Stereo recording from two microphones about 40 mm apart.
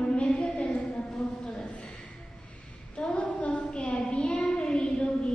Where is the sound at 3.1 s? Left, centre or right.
Left.